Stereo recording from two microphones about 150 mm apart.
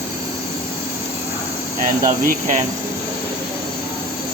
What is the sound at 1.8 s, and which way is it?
Speech, 65° right (ahead or behind).